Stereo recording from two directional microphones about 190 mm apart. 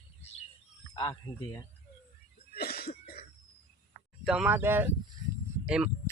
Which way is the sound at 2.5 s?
55° left (ahead or behind).